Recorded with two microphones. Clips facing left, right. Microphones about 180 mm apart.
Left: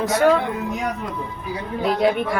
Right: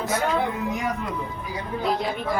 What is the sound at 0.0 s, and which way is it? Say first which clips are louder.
Speech: left 6 dB; 75° left (ahead or behind).